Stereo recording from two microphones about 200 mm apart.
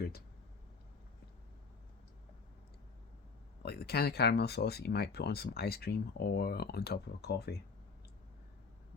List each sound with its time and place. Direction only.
3.6 s speech: 50° left (ahead or behind)